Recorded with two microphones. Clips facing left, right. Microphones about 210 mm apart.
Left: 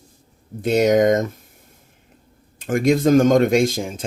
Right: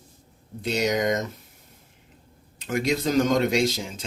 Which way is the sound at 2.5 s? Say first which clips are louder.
Left 7 dB; 50° left (ahead or behind).